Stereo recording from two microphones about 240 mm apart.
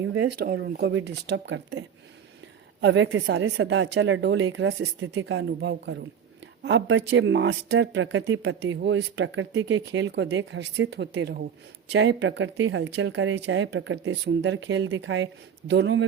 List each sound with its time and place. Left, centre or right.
0.3 s speech: right
2.8 s speech: right